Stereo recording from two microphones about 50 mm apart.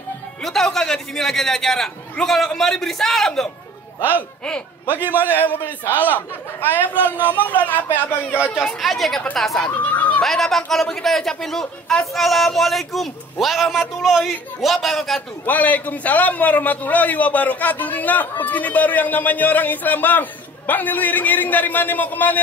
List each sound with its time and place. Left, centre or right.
0.4 s a man's voice: centre
5.3 s a man's voice: left
8.8 s a man's voice: centre
9.8 s speech: left
10.2 s a man's voice: centre
15.4 s a man's voice: left